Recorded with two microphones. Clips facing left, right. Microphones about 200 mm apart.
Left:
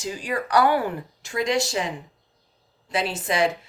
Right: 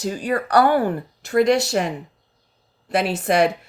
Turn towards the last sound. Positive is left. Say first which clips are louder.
# right 5 dB
turn(degrees=-65)  # may be behind; listen again after turning